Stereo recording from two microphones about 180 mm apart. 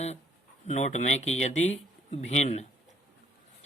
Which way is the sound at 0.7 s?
40° left (ahead or behind).